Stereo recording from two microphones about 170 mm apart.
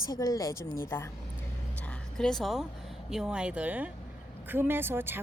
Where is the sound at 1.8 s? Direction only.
5° left (ahead or behind).